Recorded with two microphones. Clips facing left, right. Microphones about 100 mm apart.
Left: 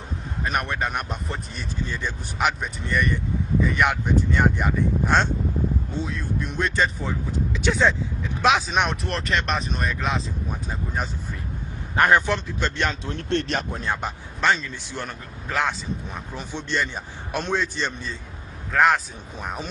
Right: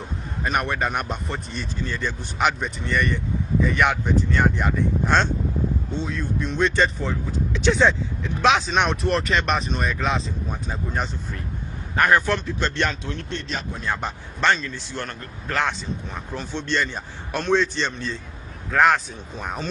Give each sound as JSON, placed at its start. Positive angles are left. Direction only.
{"t": 0.5, "sound": "speech", "side_deg": 0}
{"t": 2.3, "sound": "speech", "side_deg": 5}
{"t": 11.9, "sound": "a man's voice", "side_deg": 25}
{"t": 13.3, "sound": "speech", "side_deg": 65}
{"t": 14.0, "sound": "a man's voice", "side_deg": 5}